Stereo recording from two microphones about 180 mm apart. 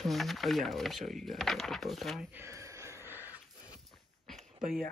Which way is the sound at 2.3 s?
15° right (ahead or behind).